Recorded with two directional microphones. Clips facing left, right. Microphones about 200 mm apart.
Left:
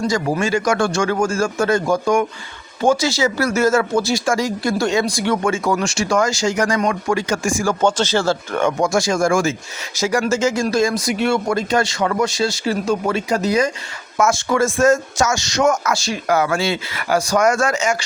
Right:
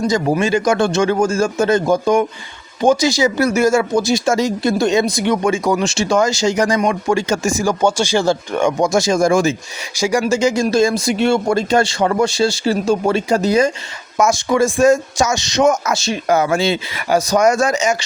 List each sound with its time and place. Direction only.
0.1 s speech: 20° right (ahead or behind)
14.2 s speech: 15° right (ahead or behind)